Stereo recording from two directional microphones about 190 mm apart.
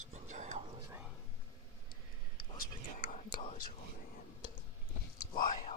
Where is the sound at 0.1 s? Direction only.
40° right (ahead or behind).